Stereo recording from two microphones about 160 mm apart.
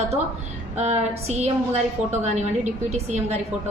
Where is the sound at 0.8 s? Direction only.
45° right (ahead or behind).